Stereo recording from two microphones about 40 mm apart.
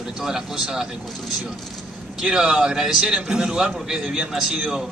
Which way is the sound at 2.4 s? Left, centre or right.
Right.